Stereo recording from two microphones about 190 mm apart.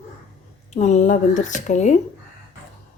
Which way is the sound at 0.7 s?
35° left (ahead or behind).